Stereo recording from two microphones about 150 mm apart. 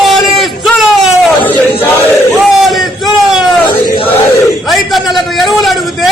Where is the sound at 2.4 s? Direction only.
Centre (ahead or behind).